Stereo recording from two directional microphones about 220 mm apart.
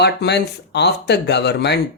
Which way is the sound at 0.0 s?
50° left (ahead or behind).